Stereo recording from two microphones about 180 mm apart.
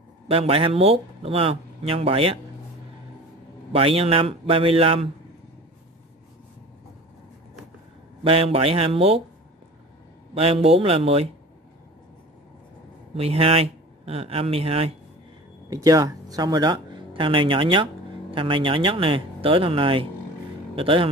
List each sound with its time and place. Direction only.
0.3 s speech: 30° right (ahead or behind)
3.7 s speech: 30° right (ahead or behind)
8.2 s speech: 30° right (ahead or behind)
10.3 s speech: 30° right (ahead or behind)
13.1 s speech: 35° right (ahead or behind)
15.7 s speech: 20° right (ahead or behind)